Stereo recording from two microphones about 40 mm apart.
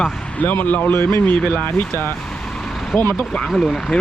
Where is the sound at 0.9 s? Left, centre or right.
Left.